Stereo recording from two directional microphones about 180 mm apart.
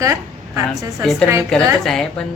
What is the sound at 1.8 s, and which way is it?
Speech, 5° left (ahead or behind).